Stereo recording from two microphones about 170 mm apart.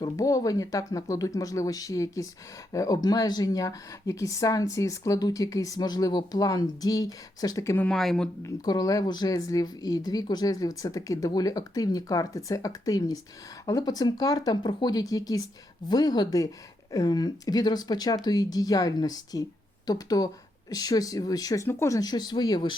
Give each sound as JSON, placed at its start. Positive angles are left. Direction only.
{"t": 0.0, "sound": "speech", "side_deg": 20}
{"t": 7.9, "sound": "speech", "side_deg": 0}
{"t": 8.6, "sound": "speech", "side_deg": 20}